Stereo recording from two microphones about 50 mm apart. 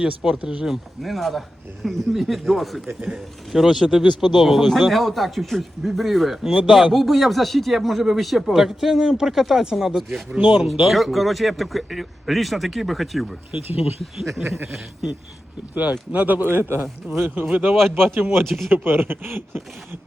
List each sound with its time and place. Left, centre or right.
0.0 s speech: centre
0.6 s speech: centre
10.3 s speech: right
10.7 s speech: centre
15.7 s speech: right
16.5 s speech: right
17.9 s speech: right
18.4 s speech: centre
18.7 s speech: right